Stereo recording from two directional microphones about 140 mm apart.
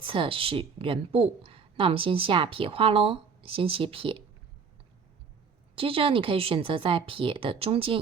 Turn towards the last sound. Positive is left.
turn(degrees=-40)  # may be behind; listen again after turning